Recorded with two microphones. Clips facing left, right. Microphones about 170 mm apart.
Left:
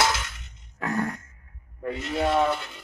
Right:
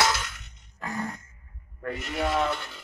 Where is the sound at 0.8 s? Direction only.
70° left (ahead or behind).